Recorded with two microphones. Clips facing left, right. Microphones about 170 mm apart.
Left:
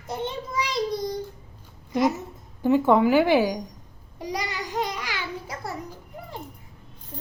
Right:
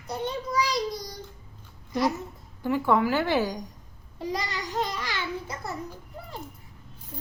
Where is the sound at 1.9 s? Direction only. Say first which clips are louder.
Left 3 dB; 20° left (ahead or behind).